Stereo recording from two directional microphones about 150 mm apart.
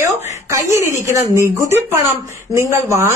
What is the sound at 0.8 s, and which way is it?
A woman's voice, 20° right (ahead or behind).